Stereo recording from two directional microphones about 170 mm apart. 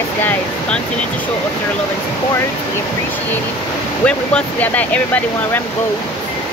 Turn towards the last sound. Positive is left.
turn(degrees=10)  # may be behind; listen again after turning